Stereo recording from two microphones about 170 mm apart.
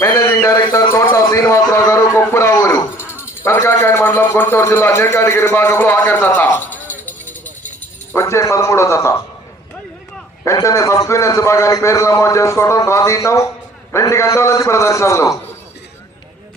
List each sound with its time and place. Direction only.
0.0 s a man's voice: 15° left (ahead or behind)
8.1 s a man's voice: 15° left (ahead or behind)
10.4 s a man's voice: 20° left (ahead or behind)